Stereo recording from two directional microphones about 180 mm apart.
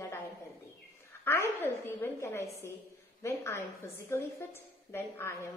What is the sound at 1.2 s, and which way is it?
A woman's voice, 15° left (ahead or behind).